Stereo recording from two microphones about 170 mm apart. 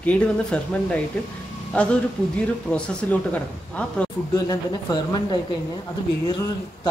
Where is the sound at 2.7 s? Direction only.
10° left (ahead or behind).